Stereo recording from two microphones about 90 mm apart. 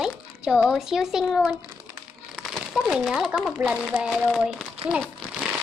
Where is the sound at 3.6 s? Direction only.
15° right (ahead or behind).